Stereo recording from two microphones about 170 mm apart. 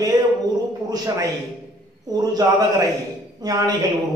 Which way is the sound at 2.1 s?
20° right (ahead or behind).